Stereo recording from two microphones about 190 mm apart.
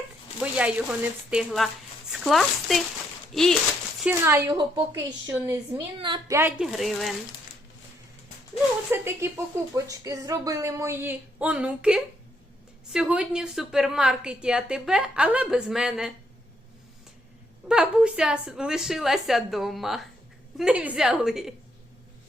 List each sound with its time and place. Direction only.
0.5 s a woman's voice: 5° right (ahead or behind)
4.0 s speech: 10° right (ahead or behind)
6.0 s a woman's voice: 25° right (ahead or behind)
6.6 s a woman's voice: centre (ahead or behind)
8.9 s a woman's voice: 10° right (ahead or behind)
17.7 s a woman's voice: 5° right (ahead or behind)